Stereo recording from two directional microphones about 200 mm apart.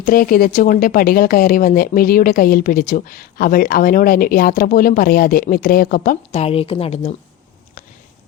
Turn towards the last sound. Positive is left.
turn(degrees=30)  # may be behind; listen again after turning